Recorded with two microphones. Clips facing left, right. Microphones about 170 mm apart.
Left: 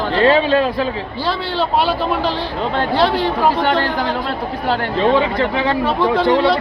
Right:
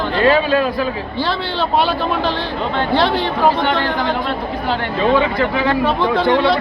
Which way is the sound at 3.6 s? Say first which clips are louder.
Left 1 dB; 35° left (ahead or behind).